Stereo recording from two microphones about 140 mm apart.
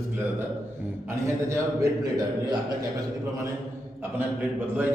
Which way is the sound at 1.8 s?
25° right (ahead or behind).